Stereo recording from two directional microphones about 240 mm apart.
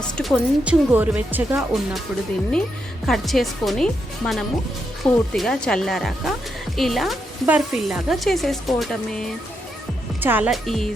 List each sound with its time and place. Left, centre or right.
0.0 s speech: centre
3.1 s speech: centre